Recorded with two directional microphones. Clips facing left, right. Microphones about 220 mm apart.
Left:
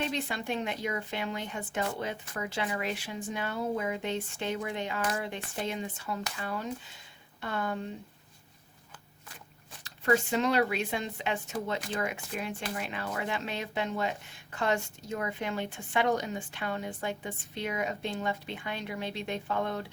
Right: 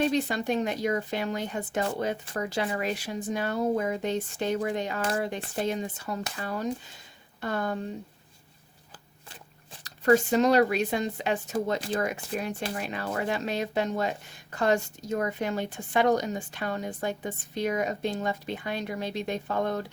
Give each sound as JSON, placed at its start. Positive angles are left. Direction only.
{"t": 0.0, "sound": "speech", "side_deg": -40}
{"t": 9.8, "sound": "speech", "side_deg": -40}